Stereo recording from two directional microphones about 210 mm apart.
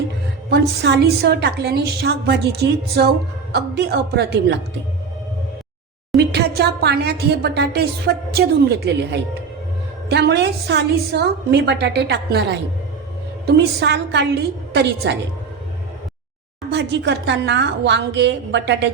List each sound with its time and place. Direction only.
0.5 s a woman's voice: 55° right (ahead or behind)
6.1 s a woman's voice: 50° right (ahead or behind)
16.7 s a woman's voice: 55° right (ahead or behind)